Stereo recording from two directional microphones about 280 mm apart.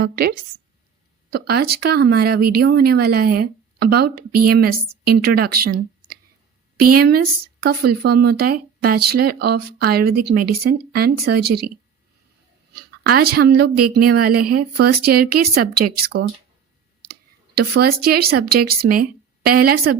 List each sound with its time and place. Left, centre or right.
0.0 s a woman's voice: right
6.7 s a woman's voice: right
7.0 s speech: right
13.1 s speech: right